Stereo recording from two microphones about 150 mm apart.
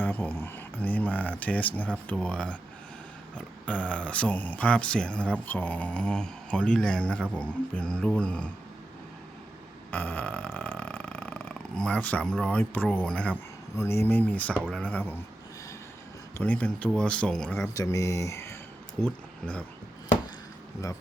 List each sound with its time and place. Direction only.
0.0 s speech: 15° left (ahead or behind)
9.9 s a sound: 10° left (ahead or behind)
13.7 s speech: 15° left (ahead or behind)
16.4 s speech: 10° left (ahead or behind)
17.5 s speech: 20° left (ahead or behind)
19.0 s speech: 5° left (ahead or behind)